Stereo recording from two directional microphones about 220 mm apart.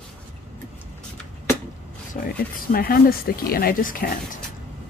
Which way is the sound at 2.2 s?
35° left (ahead or behind).